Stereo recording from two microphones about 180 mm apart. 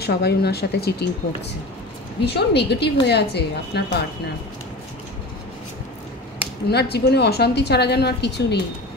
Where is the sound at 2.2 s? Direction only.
65° left (ahead or behind).